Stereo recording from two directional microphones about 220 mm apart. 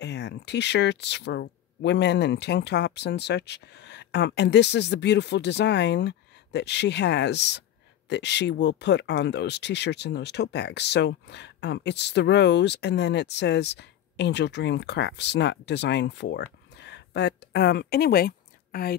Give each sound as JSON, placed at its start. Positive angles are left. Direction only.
{"t": 0.0, "sound": "speech", "side_deg": 50}